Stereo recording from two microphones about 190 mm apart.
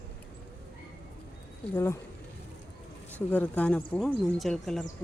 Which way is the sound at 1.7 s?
15° left (ahead or behind).